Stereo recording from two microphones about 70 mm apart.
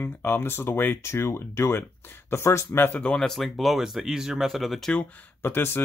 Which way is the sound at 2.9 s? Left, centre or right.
Centre.